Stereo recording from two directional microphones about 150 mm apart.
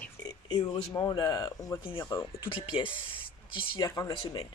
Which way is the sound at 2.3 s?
35° left (ahead or behind).